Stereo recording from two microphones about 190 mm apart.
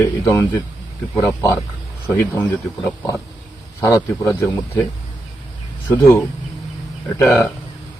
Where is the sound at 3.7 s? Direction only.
15° left (ahead or behind).